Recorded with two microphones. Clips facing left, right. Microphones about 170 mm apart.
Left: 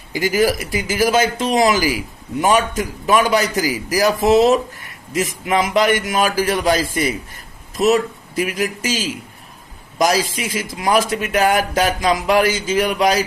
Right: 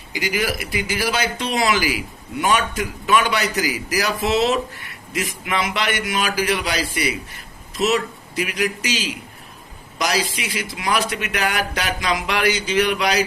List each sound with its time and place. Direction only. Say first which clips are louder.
0.1 s a man's voice: left 7 dB; 45° left (ahead or behind)